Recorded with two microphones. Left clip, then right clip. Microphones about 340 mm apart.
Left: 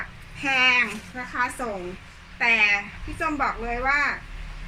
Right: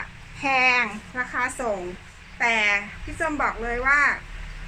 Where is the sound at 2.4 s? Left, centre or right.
Centre.